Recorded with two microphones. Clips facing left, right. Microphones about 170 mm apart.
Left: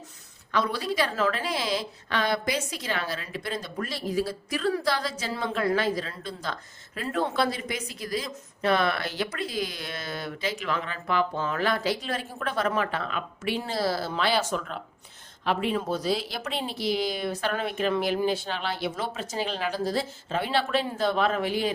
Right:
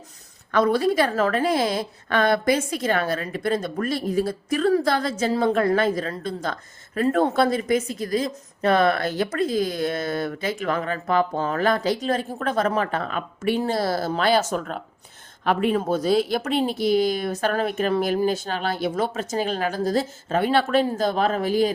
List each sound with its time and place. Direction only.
0.5 s a woman's voice: 50° right (ahead or behind)